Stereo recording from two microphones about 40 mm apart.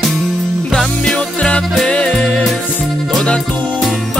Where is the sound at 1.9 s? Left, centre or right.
Left.